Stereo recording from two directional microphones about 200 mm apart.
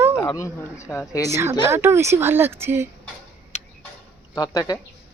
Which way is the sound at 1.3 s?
15° right (ahead or behind).